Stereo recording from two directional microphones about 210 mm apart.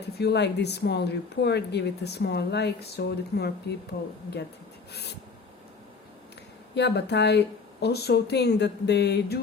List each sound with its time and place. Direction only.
0.2 s speech: 50° left (ahead or behind)
4.9 s a sound: 50° left (ahead or behind)
6.7 s speech: 55° left (ahead or behind)